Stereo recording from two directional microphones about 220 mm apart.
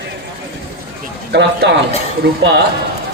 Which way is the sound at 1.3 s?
50° right (ahead or behind).